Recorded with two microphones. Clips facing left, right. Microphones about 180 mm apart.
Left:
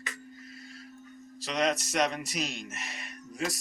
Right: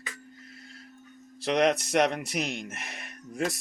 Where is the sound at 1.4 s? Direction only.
60° right (ahead or behind).